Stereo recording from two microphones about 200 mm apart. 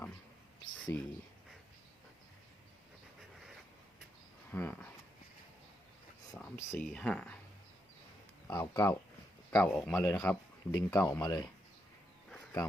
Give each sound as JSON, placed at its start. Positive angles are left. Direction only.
{"t": 0.9, "sound": "a man's voice", "side_deg": 10}
{"t": 4.5, "sound": "a man's voice", "side_deg": 10}
{"t": 6.6, "sound": "a man's voice", "side_deg": 15}
{"t": 8.4, "sound": "speech", "side_deg": 20}
{"t": 9.5, "sound": "a man's voice", "side_deg": 5}
{"t": 10.7, "sound": "a man's voice", "side_deg": 20}